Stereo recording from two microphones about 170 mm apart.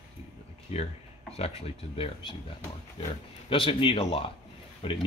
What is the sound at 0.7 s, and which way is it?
Speech, 40° left (ahead or behind).